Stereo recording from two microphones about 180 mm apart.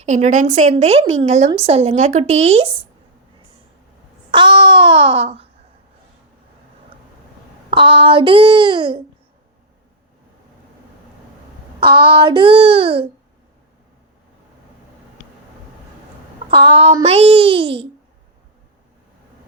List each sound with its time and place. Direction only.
0.0 s speech: 40° right (ahead or behind)
4.3 s a child's voice: 25° right (ahead or behind)
7.7 s a child's voice: 30° right (ahead or behind)
11.8 s a child's voice: 30° right (ahead or behind)
16.5 s speech: 30° right (ahead or behind)